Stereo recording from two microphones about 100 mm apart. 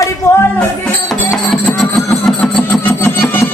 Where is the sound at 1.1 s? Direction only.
5° left (ahead or behind).